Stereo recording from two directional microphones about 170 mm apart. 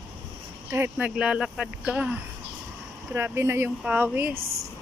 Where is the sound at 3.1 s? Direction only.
15° right (ahead or behind).